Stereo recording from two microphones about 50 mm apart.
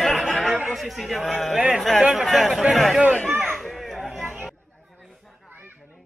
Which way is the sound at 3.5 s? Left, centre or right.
Centre.